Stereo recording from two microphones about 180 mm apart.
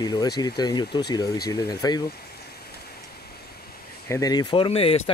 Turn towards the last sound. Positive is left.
turn(degrees=30)  # may be behind; listen again after turning